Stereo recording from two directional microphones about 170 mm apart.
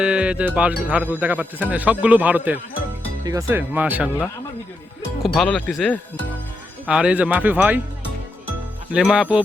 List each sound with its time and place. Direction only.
0.0 s a man's voice: 5° right (ahead or behind)
5.2 s a man's voice: centre (ahead or behind)
8.9 s speech: 5° right (ahead or behind)